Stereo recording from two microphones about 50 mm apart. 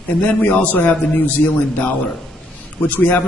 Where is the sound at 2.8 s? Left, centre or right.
Left.